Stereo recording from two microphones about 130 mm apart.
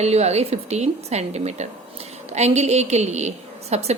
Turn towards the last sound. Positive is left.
turn(degrees=-55)  # may be behind; listen again after turning